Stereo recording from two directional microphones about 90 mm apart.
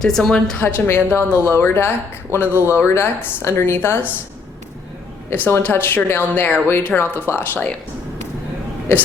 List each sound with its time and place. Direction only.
0.0 s speech: 5° left (ahead or behind)
0.6 s speech: 25° left (ahead or behind)
5.3 s speech: 25° left (ahead or behind)